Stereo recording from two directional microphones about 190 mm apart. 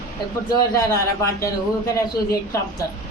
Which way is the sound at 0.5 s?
20° left (ahead or behind).